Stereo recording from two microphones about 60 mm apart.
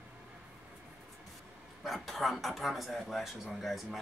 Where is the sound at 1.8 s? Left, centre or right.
Centre.